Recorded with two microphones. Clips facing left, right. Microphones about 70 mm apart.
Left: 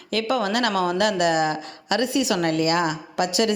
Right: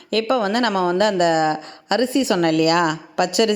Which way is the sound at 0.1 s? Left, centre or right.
Right.